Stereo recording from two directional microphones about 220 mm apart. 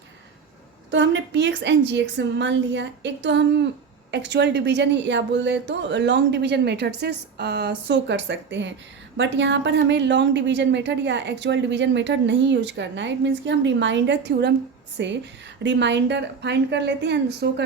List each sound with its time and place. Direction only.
0.9 s a woman's voice: 55° right (ahead or behind)